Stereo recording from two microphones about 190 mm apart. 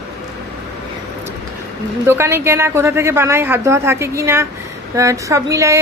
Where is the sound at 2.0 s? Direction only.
15° right (ahead or behind).